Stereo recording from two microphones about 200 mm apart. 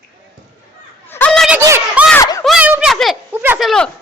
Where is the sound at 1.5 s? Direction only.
10° right (ahead or behind).